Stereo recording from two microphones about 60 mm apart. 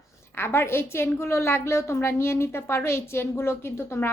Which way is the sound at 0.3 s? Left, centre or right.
Left.